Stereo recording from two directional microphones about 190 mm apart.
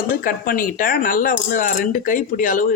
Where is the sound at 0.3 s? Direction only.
50° left (ahead or behind).